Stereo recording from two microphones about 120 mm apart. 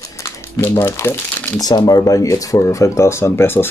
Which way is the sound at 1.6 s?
35° left (ahead or behind).